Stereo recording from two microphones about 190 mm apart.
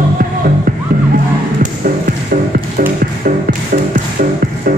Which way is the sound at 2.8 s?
45° right (ahead or behind).